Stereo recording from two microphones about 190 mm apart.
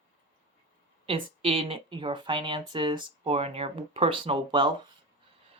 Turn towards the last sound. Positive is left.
turn(degrees=-25)  # may be behind; listen again after turning